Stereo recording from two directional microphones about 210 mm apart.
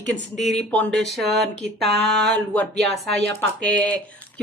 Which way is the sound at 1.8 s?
55° right (ahead or behind).